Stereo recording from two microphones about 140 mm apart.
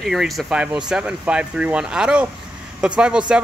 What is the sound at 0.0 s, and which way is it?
Speech, centre (ahead or behind).